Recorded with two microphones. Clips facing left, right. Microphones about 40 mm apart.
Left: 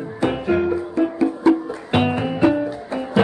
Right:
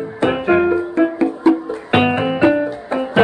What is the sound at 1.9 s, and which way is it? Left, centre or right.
Music, right.